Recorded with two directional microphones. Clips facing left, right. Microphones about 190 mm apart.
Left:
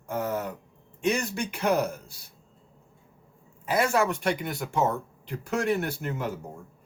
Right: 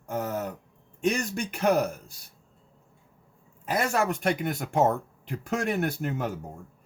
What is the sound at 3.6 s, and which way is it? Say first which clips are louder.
Speech: left 2 dB; 45° right (ahead or behind).